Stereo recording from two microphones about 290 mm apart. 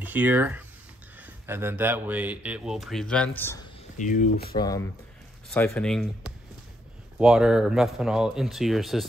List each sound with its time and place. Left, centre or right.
0.0 s speech: centre
3.9 s speech: left
4.6 s speech: centre